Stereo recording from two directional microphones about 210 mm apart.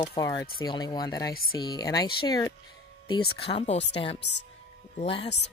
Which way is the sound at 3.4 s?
30° left (ahead or behind).